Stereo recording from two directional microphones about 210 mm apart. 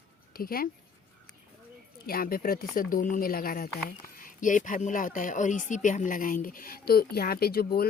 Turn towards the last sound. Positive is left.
turn(degrees=45)  # may be behind; listen again after turning